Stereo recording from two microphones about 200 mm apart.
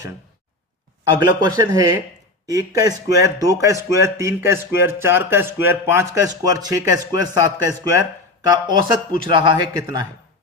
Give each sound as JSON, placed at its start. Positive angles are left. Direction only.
{"t": 1.0, "sound": "speech", "side_deg": -20}